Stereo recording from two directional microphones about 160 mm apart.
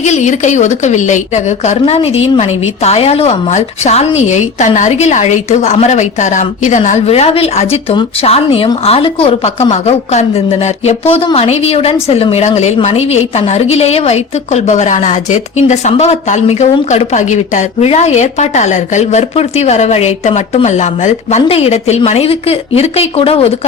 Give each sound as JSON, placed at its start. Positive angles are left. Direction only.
{"t": 0.0, "sound": "a woman's voice", "side_deg": 45}